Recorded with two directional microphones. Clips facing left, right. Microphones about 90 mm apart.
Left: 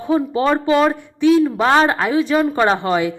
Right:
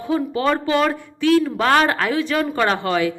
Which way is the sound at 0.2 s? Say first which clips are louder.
Left 3 dB; 25° left (ahead or behind).